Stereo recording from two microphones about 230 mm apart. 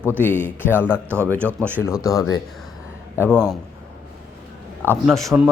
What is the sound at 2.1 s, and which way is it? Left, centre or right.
A man's voice, centre.